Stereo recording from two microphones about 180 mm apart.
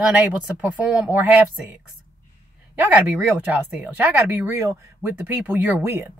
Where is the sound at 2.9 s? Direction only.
10° right (ahead or behind).